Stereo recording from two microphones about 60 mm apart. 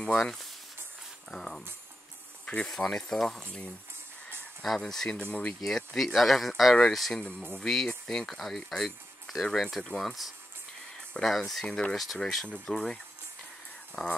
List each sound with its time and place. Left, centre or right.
0.2 s speech: centre
2.4 s speech: left
2.7 s speech: centre
4.6 s speech: centre
11.2 s speech: centre
11.6 s speech: centre
11.9 s speech: centre
14.0 s speech: centre